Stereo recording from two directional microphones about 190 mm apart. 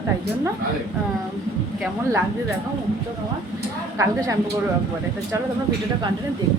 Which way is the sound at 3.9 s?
15° right (ahead or behind).